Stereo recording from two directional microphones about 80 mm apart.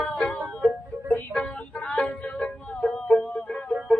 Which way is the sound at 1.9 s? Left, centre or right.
Centre.